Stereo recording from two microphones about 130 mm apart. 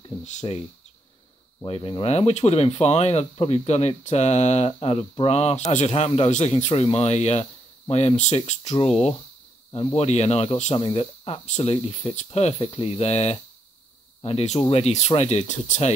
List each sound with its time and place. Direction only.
0.2 s speech: 65° left (ahead or behind)
1.7 s speech: 40° left (ahead or behind)
11.4 s speech: 55° left (ahead or behind)